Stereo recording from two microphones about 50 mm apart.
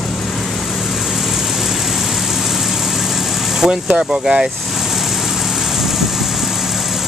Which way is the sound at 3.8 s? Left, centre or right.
Right.